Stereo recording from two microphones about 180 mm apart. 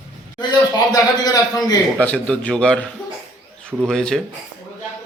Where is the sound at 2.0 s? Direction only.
5° left (ahead or behind).